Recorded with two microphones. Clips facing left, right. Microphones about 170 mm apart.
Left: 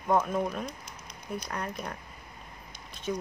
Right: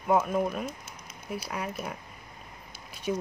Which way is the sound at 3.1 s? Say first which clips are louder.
Right 2 dB; 15° right (ahead or behind).